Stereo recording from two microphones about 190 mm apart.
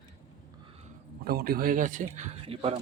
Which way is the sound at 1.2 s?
55° right (ahead or behind).